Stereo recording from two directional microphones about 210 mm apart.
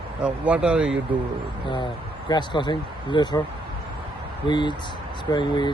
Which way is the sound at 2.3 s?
20° left (ahead or behind).